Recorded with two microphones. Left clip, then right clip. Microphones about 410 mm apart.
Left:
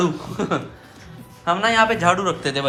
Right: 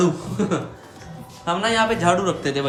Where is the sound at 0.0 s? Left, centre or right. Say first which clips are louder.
Right 1 dB; centre.